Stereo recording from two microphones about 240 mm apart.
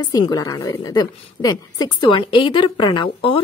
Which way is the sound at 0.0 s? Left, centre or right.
Centre.